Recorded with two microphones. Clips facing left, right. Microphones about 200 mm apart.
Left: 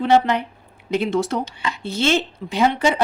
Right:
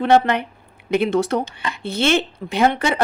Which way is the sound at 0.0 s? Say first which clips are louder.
Right 1 dB; 55° right (ahead or behind).